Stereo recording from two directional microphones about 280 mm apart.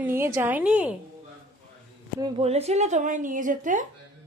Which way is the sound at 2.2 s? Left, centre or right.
Right.